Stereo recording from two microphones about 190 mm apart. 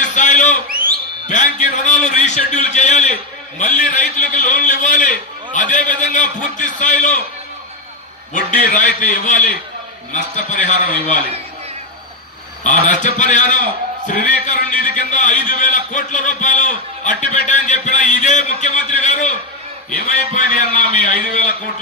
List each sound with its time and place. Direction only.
0.0 s a sound: 40° left (ahead or behind)
1.2 s a man's voice: 40° left (ahead or behind)
8.3 s a man's voice: 45° left (ahead or behind)
12.6 s a man's voice: 40° left (ahead or behind)
20.3 s a man's voice: 40° left (ahead or behind)